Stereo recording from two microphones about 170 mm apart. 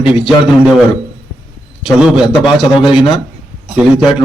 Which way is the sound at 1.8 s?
5° right (ahead or behind).